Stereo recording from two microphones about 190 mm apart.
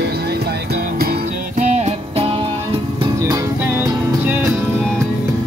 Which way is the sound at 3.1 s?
15° right (ahead or behind).